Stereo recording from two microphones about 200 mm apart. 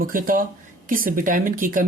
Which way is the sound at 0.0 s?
45° right (ahead or behind).